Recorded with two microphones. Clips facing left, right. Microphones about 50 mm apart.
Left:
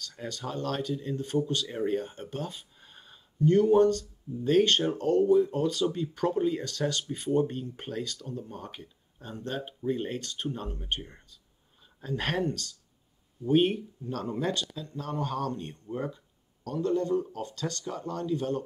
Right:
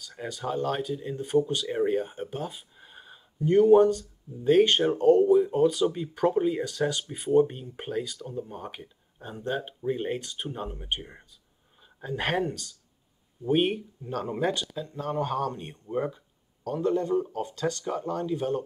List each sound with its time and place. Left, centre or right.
0.0 s speech: centre